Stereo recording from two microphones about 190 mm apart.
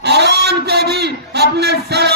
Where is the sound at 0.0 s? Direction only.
60° right (ahead or behind).